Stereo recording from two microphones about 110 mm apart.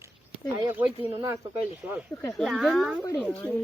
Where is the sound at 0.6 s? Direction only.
20° right (ahead or behind).